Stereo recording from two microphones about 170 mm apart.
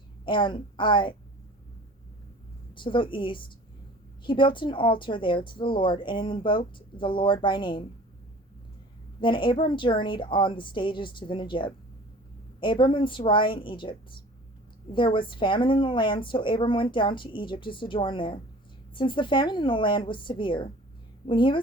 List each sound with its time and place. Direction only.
0.3 s speech: 30° left (ahead or behind)
2.7 s speech: 30° left (ahead or behind)
9.2 s speech: 30° left (ahead or behind)
14.9 s speech: 30° left (ahead or behind)